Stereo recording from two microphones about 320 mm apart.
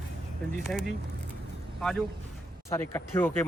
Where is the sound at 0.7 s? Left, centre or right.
Centre.